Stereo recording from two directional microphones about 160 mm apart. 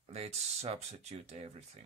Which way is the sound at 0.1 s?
40° right (ahead or behind).